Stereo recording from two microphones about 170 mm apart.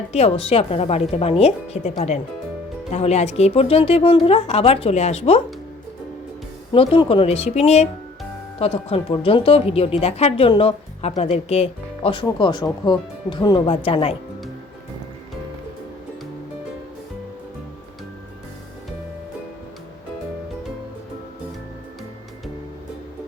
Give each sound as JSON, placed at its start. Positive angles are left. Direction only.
{"t": 0.1, "sound": "a woman's voice", "side_deg": 35}
{"t": 6.7, "sound": "a woman's voice", "side_deg": 30}
{"t": 12.2, "sound": "speech", "side_deg": 25}